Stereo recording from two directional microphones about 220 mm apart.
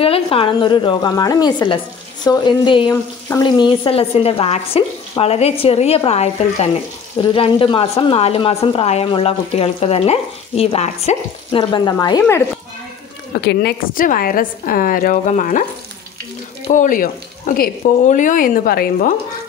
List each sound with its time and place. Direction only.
0.0 s speech: 25° left (ahead or behind)
13.3 s speech: 50° left (ahead or behind)
16.6 s speech: 35° left (ahead or behind)